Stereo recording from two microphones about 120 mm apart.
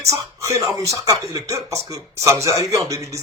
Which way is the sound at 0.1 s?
25° right (ahead or behind).